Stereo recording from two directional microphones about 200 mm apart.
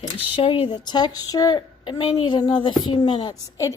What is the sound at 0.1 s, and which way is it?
A child's voice, 25° left (ahead or behind).